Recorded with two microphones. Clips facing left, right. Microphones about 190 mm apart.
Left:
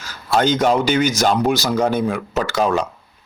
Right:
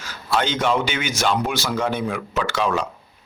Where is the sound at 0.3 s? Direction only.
40° left (ahead or behind).